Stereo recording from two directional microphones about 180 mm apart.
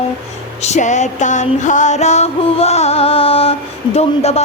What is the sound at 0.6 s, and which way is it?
Music, 40° left (ahead or behind).